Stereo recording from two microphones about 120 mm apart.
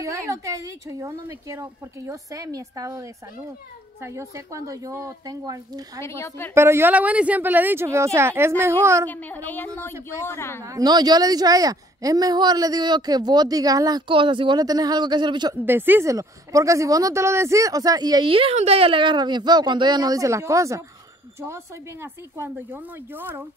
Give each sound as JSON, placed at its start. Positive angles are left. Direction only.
{"t": 0.0, "sound": "speech", "side_deg": -25}
{"t": 5.9, "sound": "speech", "side_deg": 20}
{"t": 6.5, "sound": "speech", "side_deg": -20}
{"t": 9.0, "sound": "a woman's voice", "side_deg": 15}
{"t": 10.6, "sound": "speech", "side_deg": -30}
{"t": 14.0, "sound": "speech", "side_deg": -45}
{"t": 15.6, "sound": "speech", "side_deg": -15}
{"t": 22.0, "sound": "speech", "side_deg": -20}